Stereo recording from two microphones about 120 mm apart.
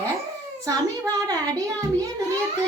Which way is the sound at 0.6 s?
30° right (ahead or behind).